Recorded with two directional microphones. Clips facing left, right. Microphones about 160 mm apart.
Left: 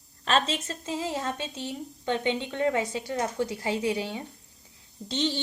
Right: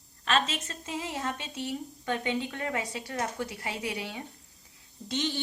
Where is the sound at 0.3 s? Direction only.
35° left (ahead or behind).